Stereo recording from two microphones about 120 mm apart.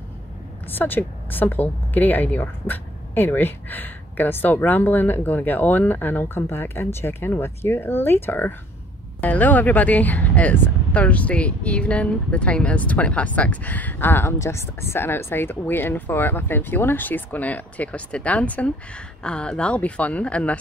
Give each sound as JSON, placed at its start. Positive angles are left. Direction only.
{"t": 0.7, "sound": "speech", "side_deg": 15}